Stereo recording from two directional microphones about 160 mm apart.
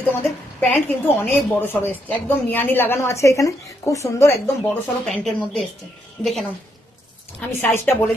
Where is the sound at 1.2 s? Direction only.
15° left (ahead or behind).